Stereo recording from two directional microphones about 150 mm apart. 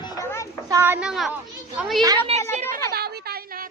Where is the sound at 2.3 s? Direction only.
40° right (ahead or behind).